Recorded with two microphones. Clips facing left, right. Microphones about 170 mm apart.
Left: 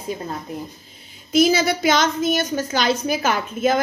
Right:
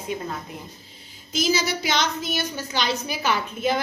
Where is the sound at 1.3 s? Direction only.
55° left (ahead or behind).